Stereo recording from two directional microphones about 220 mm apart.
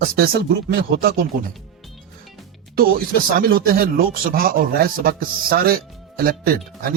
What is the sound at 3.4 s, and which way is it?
A man's voice, 40° right (ahead or behind).